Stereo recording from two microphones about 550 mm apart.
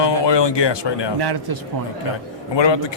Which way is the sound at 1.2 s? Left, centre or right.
Right.